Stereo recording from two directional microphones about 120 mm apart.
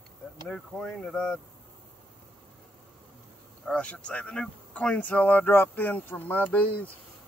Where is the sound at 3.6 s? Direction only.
10° left (ahead or behind).